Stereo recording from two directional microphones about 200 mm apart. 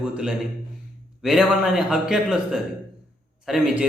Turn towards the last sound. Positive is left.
turn(degrees=0)  # may be behind; listen again after turning